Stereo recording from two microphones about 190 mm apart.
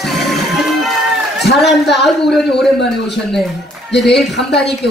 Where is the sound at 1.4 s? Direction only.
Centre (ahead or behind).